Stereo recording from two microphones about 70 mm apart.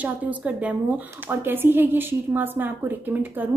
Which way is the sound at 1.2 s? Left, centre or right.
Right.